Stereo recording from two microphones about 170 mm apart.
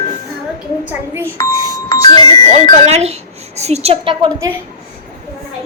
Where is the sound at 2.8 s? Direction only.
40° right (ahead or behind).